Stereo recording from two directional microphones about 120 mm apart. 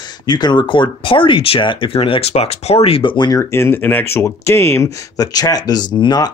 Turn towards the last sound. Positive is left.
turn(degrees=40)  # may be behind; listen again after turning